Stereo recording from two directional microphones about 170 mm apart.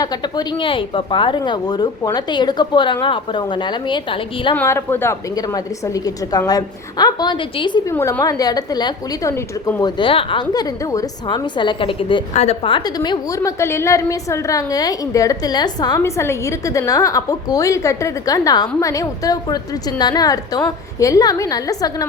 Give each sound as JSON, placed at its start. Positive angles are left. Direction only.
{"t": 0.0, "sound": "a woman's voice", "side_deg": 25}
{"t": 4.5, "sound": "a woman's voice", "side_deg": 15}
{"t": 7.9, "sound": "a woman's voice", "side_deg": 15}
{"t": 10.0, "sound": "a woman's voice", "side_deg": 30}